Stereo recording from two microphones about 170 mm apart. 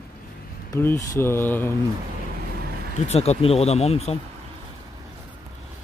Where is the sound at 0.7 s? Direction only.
15° left (ahead or behind).